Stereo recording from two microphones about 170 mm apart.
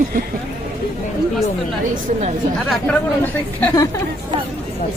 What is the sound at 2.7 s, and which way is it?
Speech, 10° left (ahead or behind).